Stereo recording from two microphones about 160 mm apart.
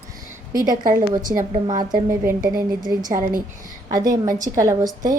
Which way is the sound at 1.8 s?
20° right (ahead or behind).